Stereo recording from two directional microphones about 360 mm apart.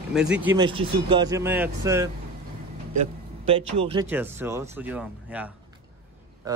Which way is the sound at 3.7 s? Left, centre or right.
Centre.